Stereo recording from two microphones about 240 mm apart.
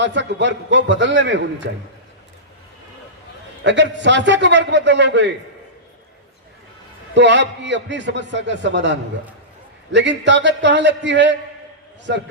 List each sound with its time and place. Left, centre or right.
0.0 s a man's voice: right
3.6 s a man's voice: right
7.1 s a man's voice: right